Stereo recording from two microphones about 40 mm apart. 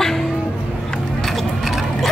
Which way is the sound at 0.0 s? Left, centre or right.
Centre.